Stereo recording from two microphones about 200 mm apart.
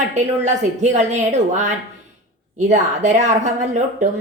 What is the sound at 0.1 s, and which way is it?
A woman's voice, 35° right (ahead or behind).